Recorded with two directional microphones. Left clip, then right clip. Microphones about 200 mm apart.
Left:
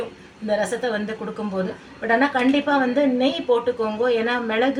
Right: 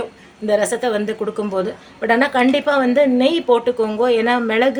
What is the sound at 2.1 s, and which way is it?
A woman's voice, 55° right (ahead or behind).